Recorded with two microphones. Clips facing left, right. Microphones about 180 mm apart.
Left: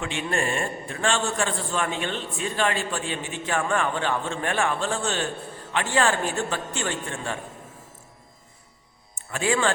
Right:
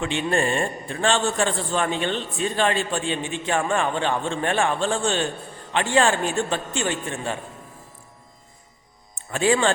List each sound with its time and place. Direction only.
0.0 s a man's voice: 30° right (ahead or behind)
9.3 s a man's voice: 30° right (ahead or behind)